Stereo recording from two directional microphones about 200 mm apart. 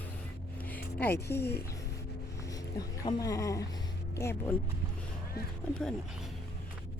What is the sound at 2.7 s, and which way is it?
Speech, 20° left (ahead or behind).